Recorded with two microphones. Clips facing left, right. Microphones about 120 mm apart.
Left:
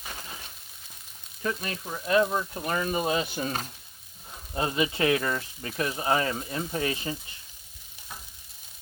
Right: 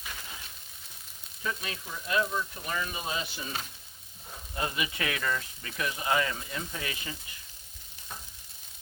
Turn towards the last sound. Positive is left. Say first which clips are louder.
# left 8 dB
turn(degrees=35)  # may be behind; listen again after turning